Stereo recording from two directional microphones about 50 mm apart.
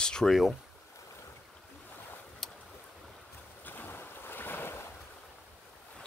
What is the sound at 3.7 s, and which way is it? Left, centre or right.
Boat, left.